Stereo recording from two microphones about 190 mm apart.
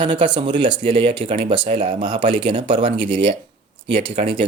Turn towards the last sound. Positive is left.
turn(degrees=-25)  # may be behind; listen again after turning